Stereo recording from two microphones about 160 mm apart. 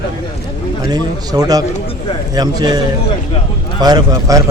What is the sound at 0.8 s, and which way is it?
Speech, 25° right (ahead or behind).